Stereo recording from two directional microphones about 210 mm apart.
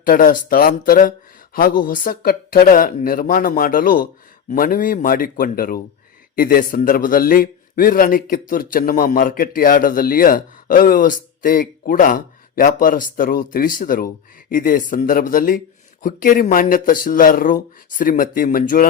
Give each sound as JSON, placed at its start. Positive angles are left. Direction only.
{"t": 0.0, "sound": "a man's voice", "side_deg": 40}